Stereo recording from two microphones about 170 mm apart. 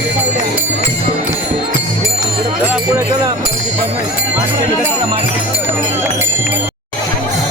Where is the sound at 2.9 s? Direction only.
15° right (ahead or behind).